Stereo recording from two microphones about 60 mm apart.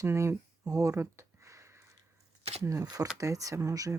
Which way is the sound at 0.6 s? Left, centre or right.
Right.